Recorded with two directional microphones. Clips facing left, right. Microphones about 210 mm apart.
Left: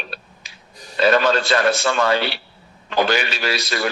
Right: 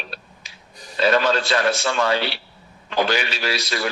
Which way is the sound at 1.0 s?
55° left (ahead or behind).